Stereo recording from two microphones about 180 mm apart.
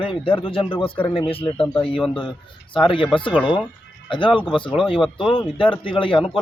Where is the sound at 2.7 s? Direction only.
30° left (ahead or behind).